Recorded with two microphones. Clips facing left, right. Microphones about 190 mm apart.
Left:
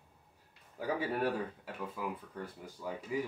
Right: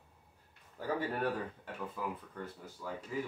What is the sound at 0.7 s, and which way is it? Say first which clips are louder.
Speech: left 1 dB; 10° left (ahead or behind).